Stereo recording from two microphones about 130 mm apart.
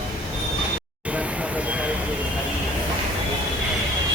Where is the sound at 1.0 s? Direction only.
10° right (ahead or behind).